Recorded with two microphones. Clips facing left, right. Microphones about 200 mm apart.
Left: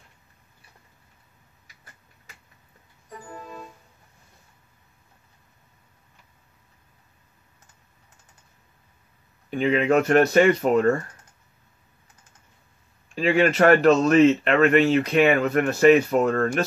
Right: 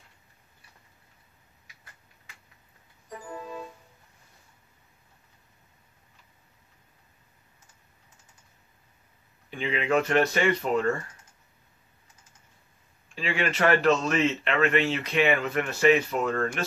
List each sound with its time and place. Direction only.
9.5 s speech: 45° left (ahead or behind)
13.1 s speech: 45° left (ahead or behind)